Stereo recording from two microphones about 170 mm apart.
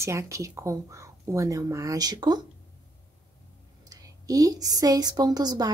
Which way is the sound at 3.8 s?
20° right (ahead or behind).